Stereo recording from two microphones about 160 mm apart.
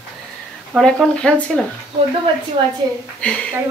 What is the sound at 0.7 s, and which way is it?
Speech, centre (ahead or behind).